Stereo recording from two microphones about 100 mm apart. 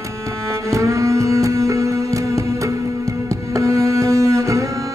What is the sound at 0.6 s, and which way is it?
Music, 30° right (ahead or behind).